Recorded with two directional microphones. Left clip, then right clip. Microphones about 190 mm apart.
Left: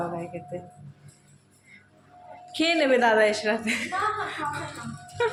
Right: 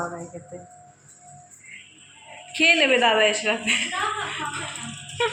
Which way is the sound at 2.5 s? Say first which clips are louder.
Right 4 dB; 15° left (ahead or behind).